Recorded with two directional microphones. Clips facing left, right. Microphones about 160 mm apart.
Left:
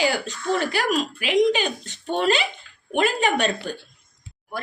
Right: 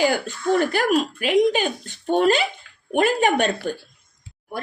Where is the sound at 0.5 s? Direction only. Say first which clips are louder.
Right 4 dB; 50° right (ahead or behind).